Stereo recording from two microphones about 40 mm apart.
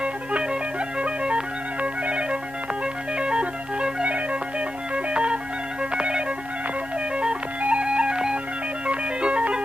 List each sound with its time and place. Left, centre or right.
0.0 s music: right